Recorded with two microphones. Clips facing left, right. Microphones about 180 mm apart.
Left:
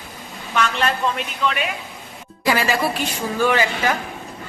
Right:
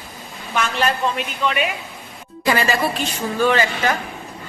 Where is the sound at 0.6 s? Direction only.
5° right (ahead or behind).